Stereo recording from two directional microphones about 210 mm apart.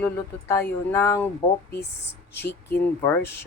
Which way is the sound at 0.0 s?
10° left (ahead or behind).